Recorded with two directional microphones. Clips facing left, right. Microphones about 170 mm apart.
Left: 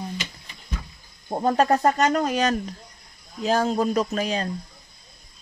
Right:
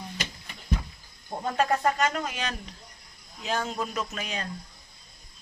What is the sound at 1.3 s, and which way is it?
Speech, 40° left (ahead or behind).